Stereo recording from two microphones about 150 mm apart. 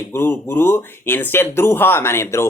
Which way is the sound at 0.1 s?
15° left (ahead or behind).